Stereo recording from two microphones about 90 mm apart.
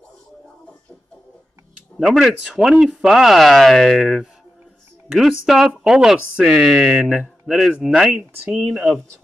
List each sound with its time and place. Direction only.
2.0 s speech: 5° right (ahead or behind)